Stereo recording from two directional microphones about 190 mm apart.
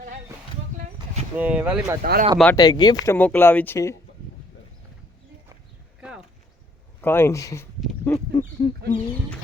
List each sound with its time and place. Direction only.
1.4 s speech: 10° right (ahead or behind)
2.0 s speech: 50° right (ahead or behind)
2.6 s speech: 20° left (ahead or behind)
3.2 s speech: 10° left (ahead or behind)
6.0 s a sound: 5° right (ahead or behind)
7.0 s speech: 10° left (ahead or behind)
8.0 s a sound: 20° left (ahead or behind)
8.9 s speech: 30° left (ahead or behind)